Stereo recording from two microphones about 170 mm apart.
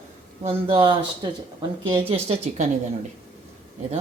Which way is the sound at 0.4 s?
30° right (ahead or behind).